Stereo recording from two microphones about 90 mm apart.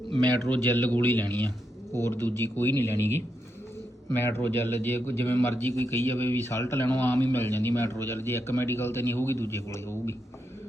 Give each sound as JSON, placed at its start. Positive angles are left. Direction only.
{"t": 0.9, "sound": "a man's voice", "side_deg": 25}